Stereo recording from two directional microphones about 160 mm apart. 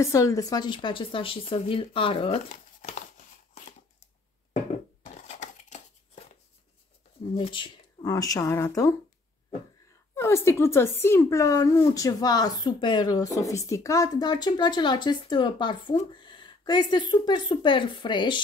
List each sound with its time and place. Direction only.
0.0 s speech: 20° left (ahead or behind); by 3.0 s 50° left (ahead or behind)
5.0 s a sound: 45° left (ahead or behind)
7.3 s speech: 30° left (ahead or behind)
10.1 s speech: 15° left (ahead or behind)